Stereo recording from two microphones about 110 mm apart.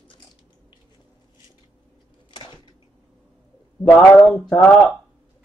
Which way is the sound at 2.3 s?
45° left (ahead or behind).